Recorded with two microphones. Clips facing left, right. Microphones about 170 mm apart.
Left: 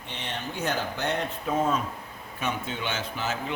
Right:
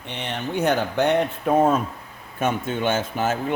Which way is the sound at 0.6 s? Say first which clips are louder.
Right 9 dB; 60° right (ahead or behind).